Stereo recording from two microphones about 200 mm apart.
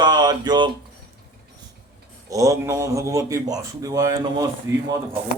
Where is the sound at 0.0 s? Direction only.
20° right (ahead or behind).